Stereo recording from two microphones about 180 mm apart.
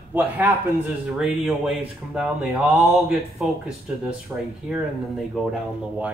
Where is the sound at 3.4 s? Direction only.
5° right (ahead or behind).